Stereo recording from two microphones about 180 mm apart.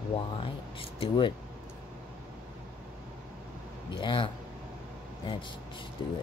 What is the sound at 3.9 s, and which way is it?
Speech, 25° left (ahead or behind).